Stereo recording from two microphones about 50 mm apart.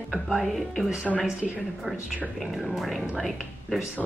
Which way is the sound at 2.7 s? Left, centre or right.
Centre.